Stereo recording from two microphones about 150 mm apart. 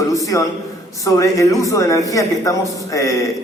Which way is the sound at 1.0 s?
20° left (ahead or behind).